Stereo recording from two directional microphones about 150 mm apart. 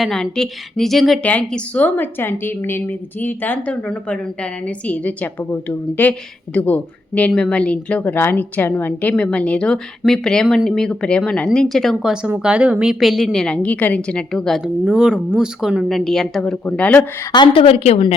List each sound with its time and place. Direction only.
0.0 s a woman's voice: 5° left (ahead or behind)
17.3 s a woman's voice: 35° left (ahead or behind)